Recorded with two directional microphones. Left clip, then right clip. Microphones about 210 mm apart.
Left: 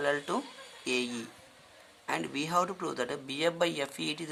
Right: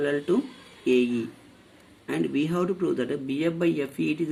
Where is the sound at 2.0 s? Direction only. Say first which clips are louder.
Right 6 dB; 25° left (ahead or behind).